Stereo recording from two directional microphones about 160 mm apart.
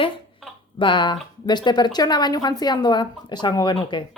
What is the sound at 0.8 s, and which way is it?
Speech, 30° left (ahead or behind).